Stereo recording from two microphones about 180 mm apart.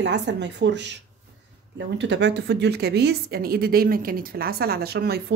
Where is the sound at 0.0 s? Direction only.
75° right (ahead or behind).